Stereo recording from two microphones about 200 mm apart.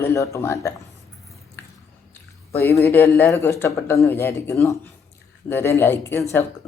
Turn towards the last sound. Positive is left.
turn(degrees=10)  # may be behind; listen again after turning